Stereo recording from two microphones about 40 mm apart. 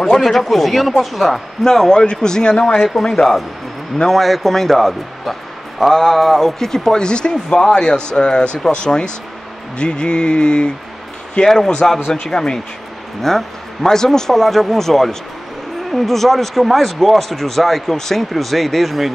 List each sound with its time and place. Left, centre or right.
0.2 s speech: centre
1.6 s speech: centre
11.4 s speech: centre
13.3 s speech: centre